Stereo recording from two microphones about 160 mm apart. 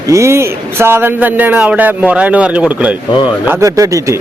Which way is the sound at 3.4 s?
20° right (ahead or behind).